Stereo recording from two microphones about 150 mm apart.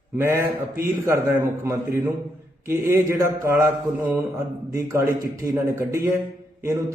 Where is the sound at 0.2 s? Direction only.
20° right (ahead or behind).